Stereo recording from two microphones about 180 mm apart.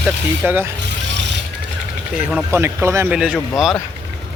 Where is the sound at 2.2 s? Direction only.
5° right (ahead or behind).